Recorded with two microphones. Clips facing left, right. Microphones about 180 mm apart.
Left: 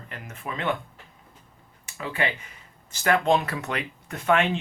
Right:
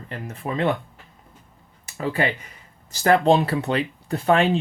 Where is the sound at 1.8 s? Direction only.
35° right (ahead or behind).